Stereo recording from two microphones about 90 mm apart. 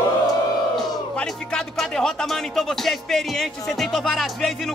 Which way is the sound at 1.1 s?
5° left (ahead or behind).